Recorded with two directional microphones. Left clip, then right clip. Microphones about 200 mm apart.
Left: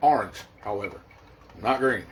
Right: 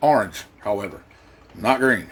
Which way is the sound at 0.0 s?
40° right (ahead or behind).